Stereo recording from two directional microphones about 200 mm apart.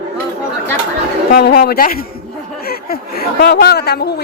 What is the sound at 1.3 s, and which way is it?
A man's voice, 55° left (ahead or behind).